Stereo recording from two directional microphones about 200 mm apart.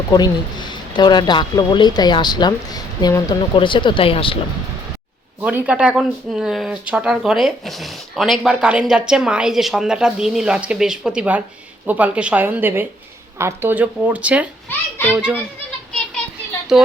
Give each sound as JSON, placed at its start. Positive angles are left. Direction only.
{"t": 0.1, "sound": "speech", "side_deg": 20}
{"t": 5.4, "sound": "speech", "side_deg": -5}
{"t": 14.7, "sound": "a child's voice", "side_deg": 10}
{"t": 15.1, "sound": "speech", "side_deg": -5}